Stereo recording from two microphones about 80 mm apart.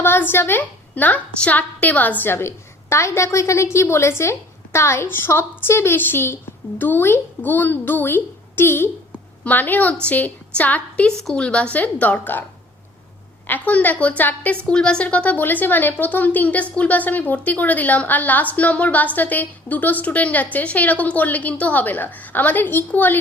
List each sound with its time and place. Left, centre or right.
0.0 s a woman's voice: left
13.5 s a woman's voice: left